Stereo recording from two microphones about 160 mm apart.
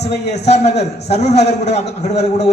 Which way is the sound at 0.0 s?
40° left (ahead or behind).